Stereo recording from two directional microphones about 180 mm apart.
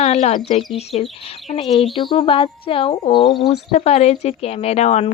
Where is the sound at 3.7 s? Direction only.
40° left (ahead or behind).